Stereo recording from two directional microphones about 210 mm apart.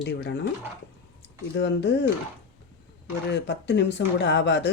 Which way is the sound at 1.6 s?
55° left (ahead or behind).